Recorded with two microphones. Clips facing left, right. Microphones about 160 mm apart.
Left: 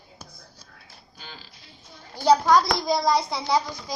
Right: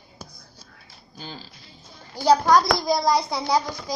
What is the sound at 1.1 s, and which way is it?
Speech, 35° right (ahead or behind).